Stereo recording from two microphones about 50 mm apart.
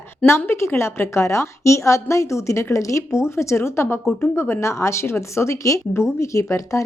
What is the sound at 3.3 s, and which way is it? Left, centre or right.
A woman's voice, left.